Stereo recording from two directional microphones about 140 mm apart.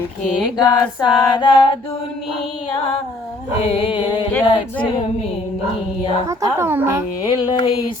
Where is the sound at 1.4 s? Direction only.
35° left (ahead or behind).